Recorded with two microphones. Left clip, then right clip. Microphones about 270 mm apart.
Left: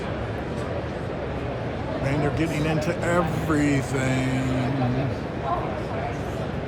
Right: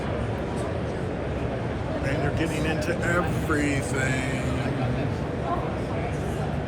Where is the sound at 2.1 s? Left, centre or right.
Left.